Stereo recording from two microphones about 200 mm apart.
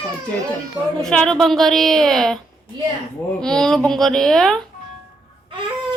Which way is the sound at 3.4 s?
5° left (ahead or behind).